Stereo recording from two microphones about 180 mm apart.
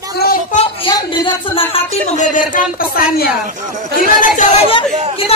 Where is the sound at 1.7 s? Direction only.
40° left (ahead or behind).